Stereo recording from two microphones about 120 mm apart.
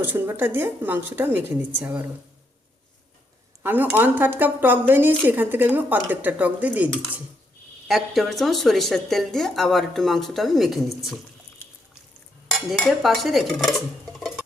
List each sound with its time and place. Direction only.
0.0 s speech: 15° right (ahead or behind)
3.6 s speech: 15° right (ahead or behind)
7.9 s a woman's voice: centre (ahead or behind)
12.5 s dishes: centre (ahead or behind)